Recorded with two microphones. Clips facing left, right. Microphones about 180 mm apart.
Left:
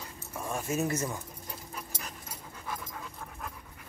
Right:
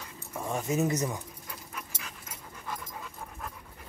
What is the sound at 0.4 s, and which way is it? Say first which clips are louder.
Speech: right 3 dB; 20° right (ahead or behind).